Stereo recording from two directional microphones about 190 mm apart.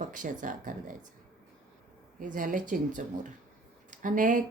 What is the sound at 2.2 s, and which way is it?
A woman's voice, 45° right (ahead or behind).